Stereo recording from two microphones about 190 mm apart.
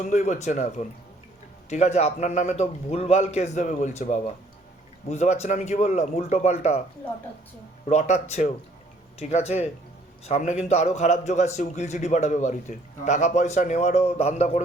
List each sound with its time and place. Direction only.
0.0 s a man's voice: 35° left (ahead or behind)
7.9 s a man's voice: 35° left (ahead or behind)